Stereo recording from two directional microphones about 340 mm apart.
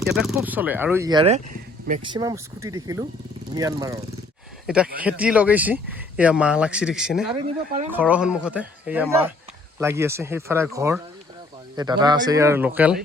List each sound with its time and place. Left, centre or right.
0.0 s speech: centre
7.4 s speech: right
7.9 s speech: centre